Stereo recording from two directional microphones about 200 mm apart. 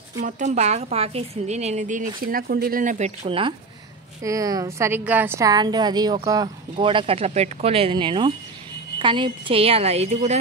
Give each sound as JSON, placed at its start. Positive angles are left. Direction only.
{"t": 0.2, "sound": "a woman's voice", "side_deg": -35}
{"t": 3.3, "sound": "a woman's voice", "side_deg": -25}
{"t": 4.2, "sound": "a woman's voice", "side_deg": -15}